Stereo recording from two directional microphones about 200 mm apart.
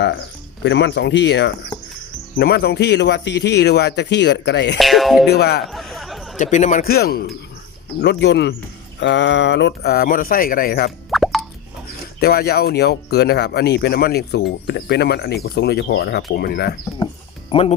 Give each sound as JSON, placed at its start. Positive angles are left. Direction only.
{"t": 0.6, "sound": "speech", "side_deg": 60}
{"t": 4.8, "sound": "speech", "side_deg": 0}
{"t": 5.3, "sound": "speech", "side_deg": 55}
{"t": 5.6, "sound": "chatter", "side_deg": 0}
{"t": 6.4, "sound": "speech", "side_deg": 35}
{"t": 11.1, "sound": "plop", "side_deg": 0}
{"t": 12.2, "sound": "speech", "side_deg": 50}
{"t": 17.5, "sound": "speech", "side_deg": 30}